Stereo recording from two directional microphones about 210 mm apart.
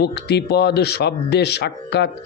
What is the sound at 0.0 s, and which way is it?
Speech, 55° left (ahead or behind).